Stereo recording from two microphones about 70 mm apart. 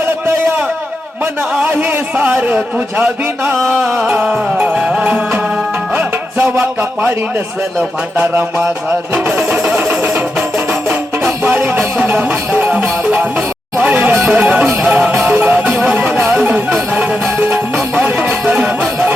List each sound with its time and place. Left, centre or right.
1.2 s a sound: right
2.1 s music: right
4.8 s music: centre
5.0 s music: right
8.2 s music: right
12.7 s music: centre
13.7 s speech: right
14.1 s music: right
14.3 s music: right
15.1 s music: right